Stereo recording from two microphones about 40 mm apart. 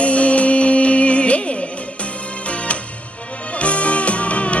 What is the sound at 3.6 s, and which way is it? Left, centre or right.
Music, left.